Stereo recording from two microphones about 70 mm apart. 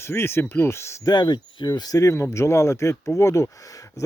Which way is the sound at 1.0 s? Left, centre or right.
Left.